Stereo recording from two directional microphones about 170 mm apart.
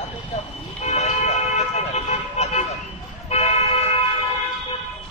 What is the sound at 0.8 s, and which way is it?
Vehicle, 40° left (ahead or behind).